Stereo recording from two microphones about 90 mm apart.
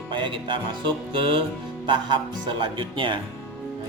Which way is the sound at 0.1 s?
65° right (ahead or behind).